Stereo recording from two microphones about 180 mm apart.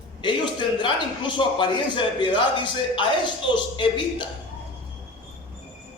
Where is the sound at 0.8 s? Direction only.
25° left (ahead or behind).